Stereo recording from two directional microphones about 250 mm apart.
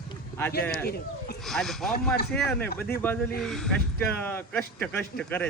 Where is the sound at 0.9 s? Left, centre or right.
Left.